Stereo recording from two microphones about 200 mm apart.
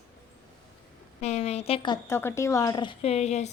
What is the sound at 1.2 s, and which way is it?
A woman's voice, 30° left (ahead or behind).